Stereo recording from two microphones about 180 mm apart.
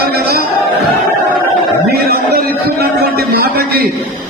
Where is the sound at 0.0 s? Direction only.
60° right (ahead or behind).